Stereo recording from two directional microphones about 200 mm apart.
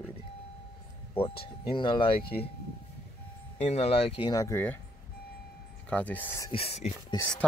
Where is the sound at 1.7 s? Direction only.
25° left (ahead or behind).